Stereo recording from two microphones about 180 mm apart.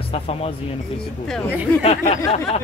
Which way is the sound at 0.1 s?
35° left (ahead or behind).